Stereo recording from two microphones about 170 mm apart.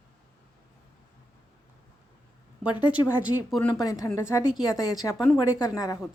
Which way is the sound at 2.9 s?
10° right (ahead or behind).